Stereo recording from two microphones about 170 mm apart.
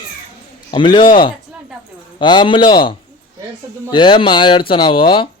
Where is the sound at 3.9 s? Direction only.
30° left (ahead or behind).